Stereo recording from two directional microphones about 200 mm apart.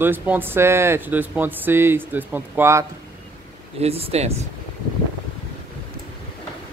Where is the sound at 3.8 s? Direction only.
30° right (ahead or behind).